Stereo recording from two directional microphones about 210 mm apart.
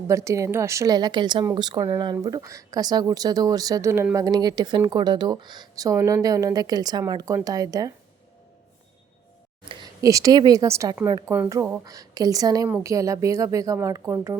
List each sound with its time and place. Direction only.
0.1 s a woman's voice: 15° right (ahead or behind)
9.6 s a woman's voice: 20° right (ahead or behind)